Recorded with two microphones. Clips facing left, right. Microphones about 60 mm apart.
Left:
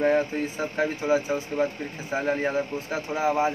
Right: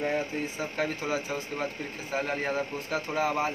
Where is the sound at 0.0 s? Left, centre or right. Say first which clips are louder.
Left 7 dB; left.